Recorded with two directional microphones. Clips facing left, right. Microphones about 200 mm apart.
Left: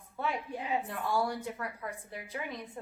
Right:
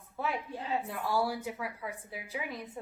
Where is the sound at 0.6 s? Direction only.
15° left (ahead or behind).